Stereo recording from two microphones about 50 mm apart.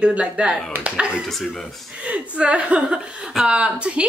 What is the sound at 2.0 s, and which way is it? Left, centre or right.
A woman's voice, right.